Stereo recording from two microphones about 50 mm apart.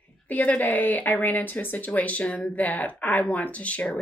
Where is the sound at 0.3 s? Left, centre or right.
Left.